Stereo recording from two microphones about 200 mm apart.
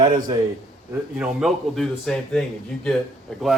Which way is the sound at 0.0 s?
45° right (ahead or behind).